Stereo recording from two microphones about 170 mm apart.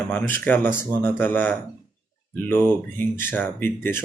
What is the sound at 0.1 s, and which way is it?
Speech, 10° left (ahead or behind).